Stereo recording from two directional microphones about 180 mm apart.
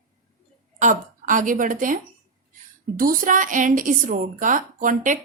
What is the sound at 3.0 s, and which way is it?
A woman's voice, 50° right (ahead or behind).